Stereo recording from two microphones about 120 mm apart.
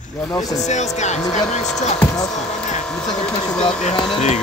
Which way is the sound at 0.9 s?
75° left (ahead or behind).